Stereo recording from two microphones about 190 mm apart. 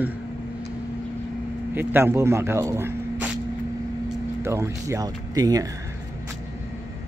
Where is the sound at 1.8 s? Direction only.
10° right (ahead or behind).